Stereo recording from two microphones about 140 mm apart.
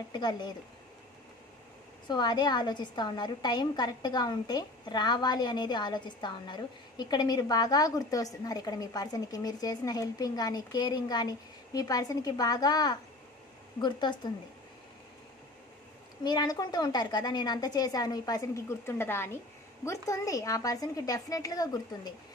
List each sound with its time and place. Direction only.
0.1 s speech: 30° left (ahead or behind)
2.0 s a woman's voice: 30° left (ahead or behind)
16.3 s a woman's voice: 30° left (ahead or behind)